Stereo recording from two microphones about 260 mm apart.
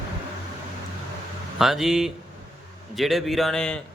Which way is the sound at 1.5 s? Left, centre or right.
Centre.